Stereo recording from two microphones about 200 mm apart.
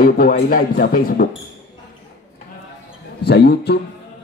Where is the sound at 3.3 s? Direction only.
55° left (ahead or behind).